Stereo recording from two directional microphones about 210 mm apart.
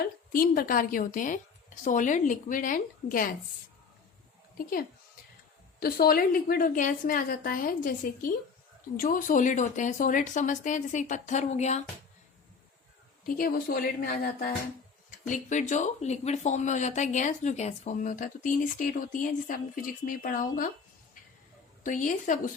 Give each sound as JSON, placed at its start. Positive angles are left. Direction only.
{"t": 0.0, "sound": "speech", "side_deg": 40}
{"t": 4.5, "sound": "a woman's voice", "side_deg": 40}
{"t": 13.2, "sound": "a woman's voice", "side_deg": 40}
{"t": 21.8, "sound": "speech", "side_deg": 35}